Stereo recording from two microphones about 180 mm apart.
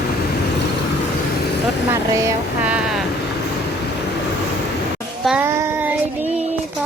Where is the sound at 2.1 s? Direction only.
15° right (ahead or behind).